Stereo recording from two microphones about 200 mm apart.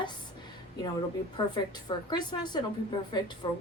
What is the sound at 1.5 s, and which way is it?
A woman's voice, 20° left (ahead or behind).